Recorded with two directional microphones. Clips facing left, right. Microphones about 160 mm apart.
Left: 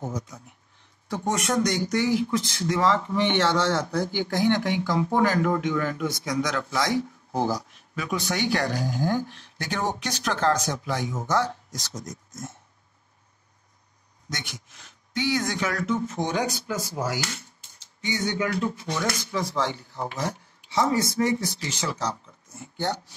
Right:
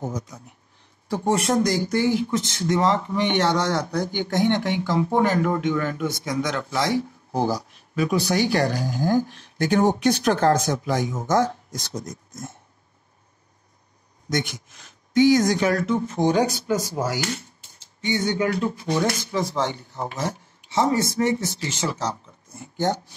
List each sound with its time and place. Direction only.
0.0 s speech: 35° right (ahead or behind)
11.9 s speech: 30° right (ahead or behind)
14.8 s speech: 45° right (ahead or behind)